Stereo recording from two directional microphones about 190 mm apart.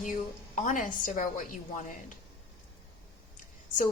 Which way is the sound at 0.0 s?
40° left (ahead or behind).